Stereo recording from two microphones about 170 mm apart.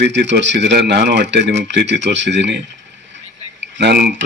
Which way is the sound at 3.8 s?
70° right (ahead or behind).